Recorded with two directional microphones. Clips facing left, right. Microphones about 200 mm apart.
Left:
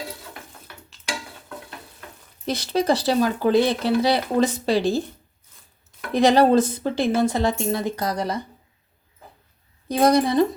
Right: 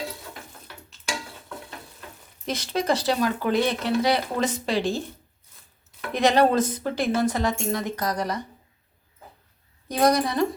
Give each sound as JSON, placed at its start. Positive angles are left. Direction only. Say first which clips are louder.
{"t": 2.5, "sound": "speech", "louder": "left 4 dB", "side_deg": 35}
{"t": 6.1, "sound": "a woman's voice", "louder": "left 4 dB", "side_deg": 35}
{"t": 9.9, "sound": "a woman's voice", "louder": "left 4 dB", "side_deg": 25}